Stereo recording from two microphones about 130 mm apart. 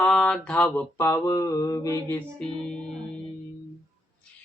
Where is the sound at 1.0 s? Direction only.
25° left (ahead or behind).